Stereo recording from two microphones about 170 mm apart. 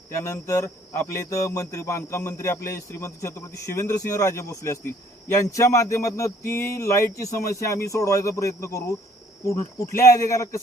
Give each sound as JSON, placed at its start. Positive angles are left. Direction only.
{"t": 0.2, "sound": "a man's voice", "side_deg": 15}